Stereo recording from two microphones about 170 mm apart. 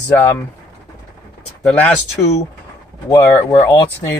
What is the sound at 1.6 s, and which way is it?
Speech, 10° left (ahead or behind).